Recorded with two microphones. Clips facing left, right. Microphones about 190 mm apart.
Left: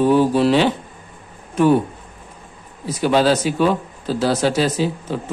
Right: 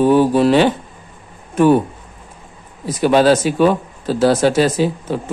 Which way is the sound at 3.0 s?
50° right (ahead or behind).